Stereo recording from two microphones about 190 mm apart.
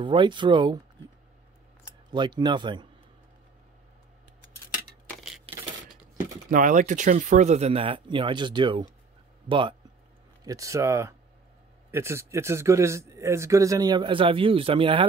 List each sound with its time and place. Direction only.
0.0 s speech: 25° right (ahead or behind)
1.9 s speech: 25° right (ahead or behind)
5.0 s a sound: centre (ahead or behind)
6.5 s speech: 40° right (ahead or behind)